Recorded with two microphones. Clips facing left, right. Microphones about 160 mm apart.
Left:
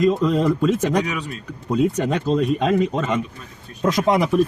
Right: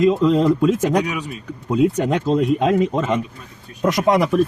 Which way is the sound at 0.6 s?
10° right (ahead or behind).